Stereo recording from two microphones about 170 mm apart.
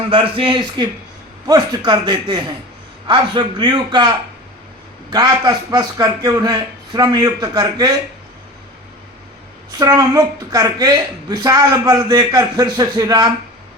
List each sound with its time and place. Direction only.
0.1 s a woman's voice: 30° right (ahead or behind)
5.1 s a woman's voice: 25° right (ahead or behind)
9.7 s a woman's voice: 20° right (ahead or behind)